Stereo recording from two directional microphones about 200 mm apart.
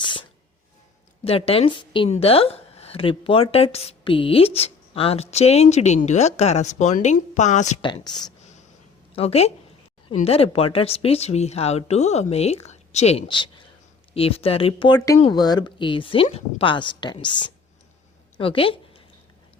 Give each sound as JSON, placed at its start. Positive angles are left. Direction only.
{"t": 0.0, "sound": "sneeze", "side_deg": 25}
{"t": 1.2, "sound": "a woman's voice", "side_deg": 30}
{"t": 7.8, "sound": "a woman's voice", "side_deg": 25}